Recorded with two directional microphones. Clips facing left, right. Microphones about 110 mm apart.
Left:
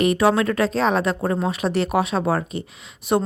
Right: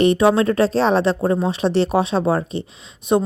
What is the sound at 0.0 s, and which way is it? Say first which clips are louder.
Speech: right 3 dB; 25° right (ahead or behind).